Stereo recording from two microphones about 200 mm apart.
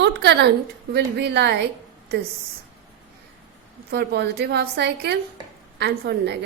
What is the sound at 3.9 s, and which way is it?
A woman's voice, 55° right (ahead or behind).